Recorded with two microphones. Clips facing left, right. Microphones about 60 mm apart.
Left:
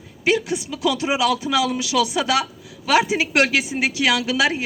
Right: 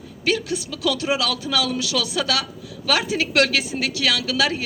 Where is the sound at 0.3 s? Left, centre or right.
Centre.